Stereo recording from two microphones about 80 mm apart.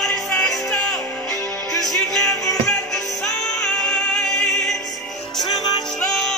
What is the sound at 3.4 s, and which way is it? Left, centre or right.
Music, centre.